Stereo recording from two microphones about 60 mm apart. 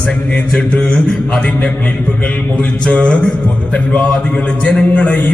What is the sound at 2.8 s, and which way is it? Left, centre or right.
Speech, centre.